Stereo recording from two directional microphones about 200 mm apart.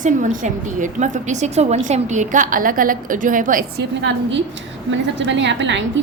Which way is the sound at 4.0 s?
65° right (ahead or behind).